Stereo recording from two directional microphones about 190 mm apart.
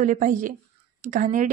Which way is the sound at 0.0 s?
40° right (ahead or behind).